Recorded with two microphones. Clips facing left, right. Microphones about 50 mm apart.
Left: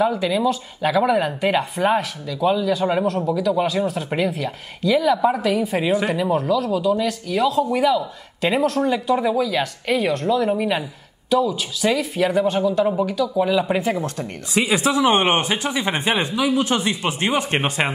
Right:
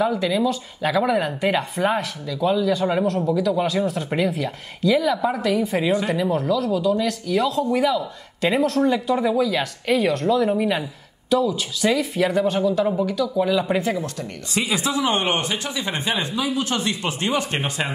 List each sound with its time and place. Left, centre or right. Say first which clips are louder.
0.0 s speech: left 1 dB; centre
13.9 s speech: left 2 dB; left
16.4 s speech: left 4 dB; centre
16.7 s speech: left 3 dB; left